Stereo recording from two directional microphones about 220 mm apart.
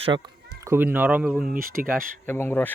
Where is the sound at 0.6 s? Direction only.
10° right (ahead or behind).